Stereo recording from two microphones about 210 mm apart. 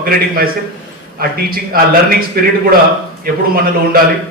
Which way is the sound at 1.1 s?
45° right (ahead or behind).